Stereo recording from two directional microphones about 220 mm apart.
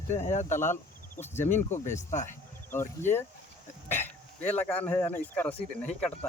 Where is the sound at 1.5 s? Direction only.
35° left (ahead or behind).